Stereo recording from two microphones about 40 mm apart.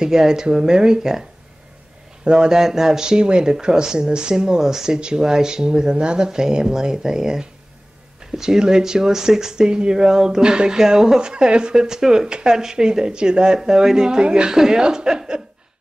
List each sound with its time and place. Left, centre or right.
0.0 s speech: centre
2.2 s speech: right